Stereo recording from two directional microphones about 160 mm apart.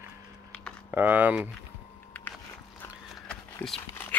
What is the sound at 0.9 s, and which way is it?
Speech, 10° right (ahead or behind).